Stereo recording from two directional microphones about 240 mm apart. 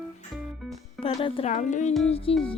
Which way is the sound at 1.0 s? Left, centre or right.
Left.